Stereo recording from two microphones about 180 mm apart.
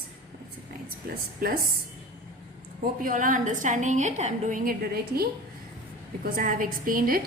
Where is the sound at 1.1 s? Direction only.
55° right (ahead or behind).